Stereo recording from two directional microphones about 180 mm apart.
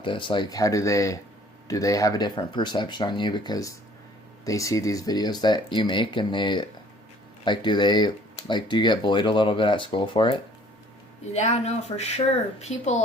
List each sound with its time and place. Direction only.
0.0 s speech: 25° left (ahead or behind)
11.3 s speech: 40° left (ahead or behind)